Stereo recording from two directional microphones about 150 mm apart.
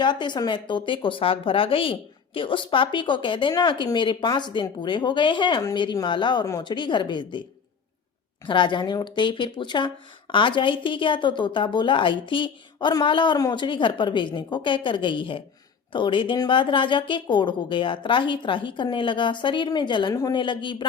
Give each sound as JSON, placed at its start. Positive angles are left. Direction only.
{"t": 0.0, "sound": "speech", "side_deg": 30}
{"t": 8.4, "sound": "speech", "side_deg": 30}